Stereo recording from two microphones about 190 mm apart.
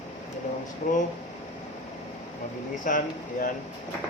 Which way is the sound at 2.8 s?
45° left (ahead or behind).